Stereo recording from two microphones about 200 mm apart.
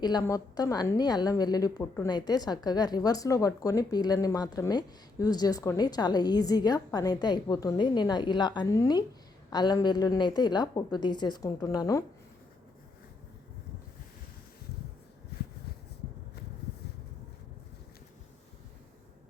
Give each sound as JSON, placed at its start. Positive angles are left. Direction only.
{"t": 0.0, "sound": "a woman's voice", "side_deg": 20}